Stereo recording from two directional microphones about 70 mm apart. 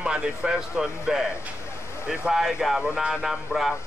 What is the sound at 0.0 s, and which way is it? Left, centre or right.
Speech, centre.